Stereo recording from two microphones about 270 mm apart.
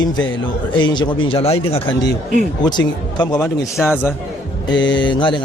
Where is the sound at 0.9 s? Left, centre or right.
Left.